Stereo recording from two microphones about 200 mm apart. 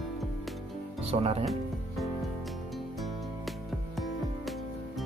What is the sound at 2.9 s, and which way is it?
Music, centre (ahead or behind).